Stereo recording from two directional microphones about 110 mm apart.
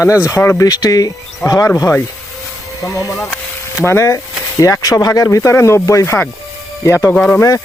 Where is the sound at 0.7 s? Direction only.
35° left (ahead or behind).